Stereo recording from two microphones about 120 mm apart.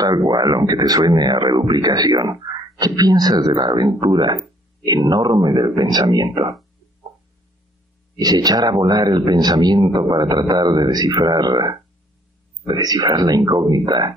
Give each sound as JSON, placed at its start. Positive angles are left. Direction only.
{"t": 0.0, "sound": "speech", "side_deg": -35}
{"t": 8.2, "sound": "speech", "side_deg": -35}